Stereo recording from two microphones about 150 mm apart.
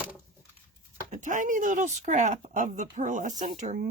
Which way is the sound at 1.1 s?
55° right (ahead or behind).